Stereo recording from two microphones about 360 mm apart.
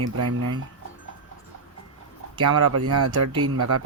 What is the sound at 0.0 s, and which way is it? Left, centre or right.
Speech, right.